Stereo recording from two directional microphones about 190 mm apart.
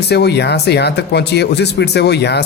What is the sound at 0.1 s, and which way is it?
Speech, 60° left (ahead or behind).